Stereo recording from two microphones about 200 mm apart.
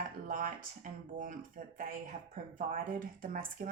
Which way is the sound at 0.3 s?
40° right (ahead or behind).